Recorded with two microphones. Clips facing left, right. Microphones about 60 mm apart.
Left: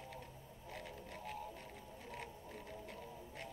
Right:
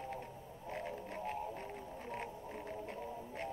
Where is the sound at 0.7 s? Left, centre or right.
Right.